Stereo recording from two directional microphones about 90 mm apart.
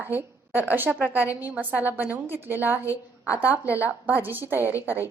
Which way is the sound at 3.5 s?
30° left (ahead or behind).